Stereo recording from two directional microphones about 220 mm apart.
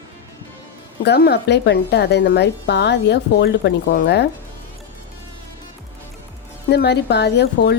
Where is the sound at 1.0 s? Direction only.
45° left (ahead or behind).